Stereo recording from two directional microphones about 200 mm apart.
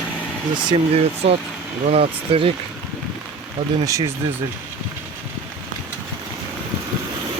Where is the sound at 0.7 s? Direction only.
30° right (ahead or behind).